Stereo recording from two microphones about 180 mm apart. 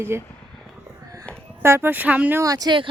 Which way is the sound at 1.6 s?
15° right (ahead or behind).